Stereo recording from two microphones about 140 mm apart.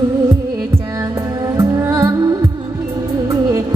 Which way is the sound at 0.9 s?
25° right (ahead or behind).